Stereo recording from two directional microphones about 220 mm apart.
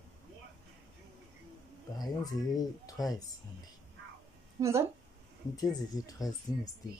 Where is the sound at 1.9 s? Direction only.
15° left (ahead or behind).